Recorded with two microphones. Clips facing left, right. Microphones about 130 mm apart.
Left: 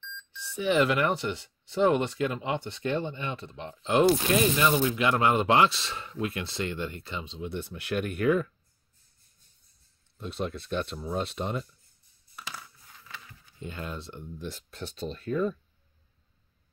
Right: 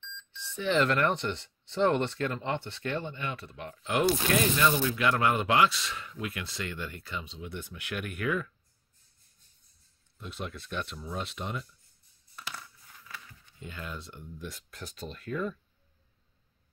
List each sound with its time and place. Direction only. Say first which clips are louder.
0.3 s speech: left 2 dB; 10° left (ahead or behind); by 8.5 s 35° left (ahead or behind)
10.1 s speech: left 6 dB; 35° left (ahead or behind)
13.6 s speech: left 4 dB; 30° left (ahead or behind)